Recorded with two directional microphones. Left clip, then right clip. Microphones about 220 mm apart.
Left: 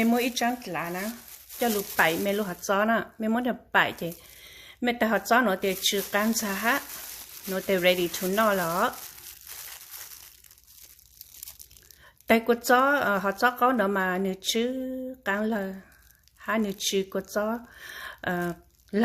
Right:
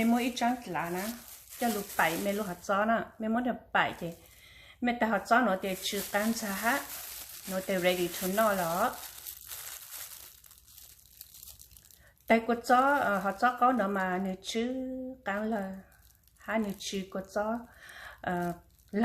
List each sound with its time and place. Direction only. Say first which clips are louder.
0.0 s speech: left 4 dB; 50° left (ahead or behind)
12.3 s speech: left 4 dB; 50° left (ahead or behind)